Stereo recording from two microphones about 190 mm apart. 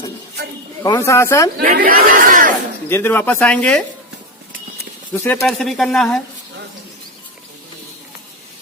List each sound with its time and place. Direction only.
0.8 s speech: 15° left (ahead or behind)
1.5 s speech: 55° right (ahead or behind)
2.9 s speech: 10° left (ahead or behind)
5.1 s speech: 10° left (ahead or behind)